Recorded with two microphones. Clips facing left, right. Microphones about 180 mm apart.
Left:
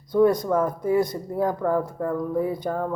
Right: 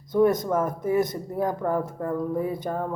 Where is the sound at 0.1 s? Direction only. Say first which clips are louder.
Left 2 dB; 20° right (ahead or behind).